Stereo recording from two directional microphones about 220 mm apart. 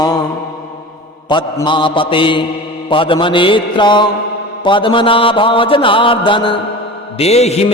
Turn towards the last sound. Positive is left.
turn(degrees=30)  # may be behind; listen again after turning